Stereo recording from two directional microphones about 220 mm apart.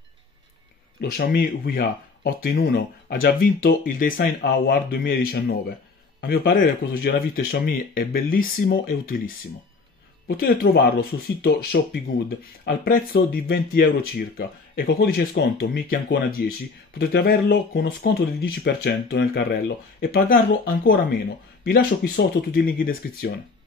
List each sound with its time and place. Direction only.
1.1 s speech: 45° left (ahead or behind)